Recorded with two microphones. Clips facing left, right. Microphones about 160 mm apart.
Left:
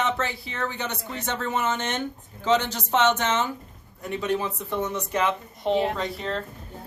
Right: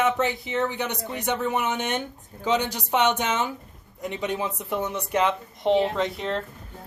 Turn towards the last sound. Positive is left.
turn(degrees=-20)  # may be behind; listen again after turning